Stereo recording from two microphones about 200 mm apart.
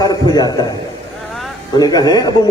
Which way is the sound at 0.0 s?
20° left (ahead or behind).